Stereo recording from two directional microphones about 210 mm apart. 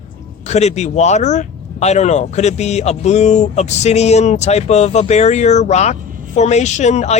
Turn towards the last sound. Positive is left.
turn(degrees=30)  # may be behind; listen again after turning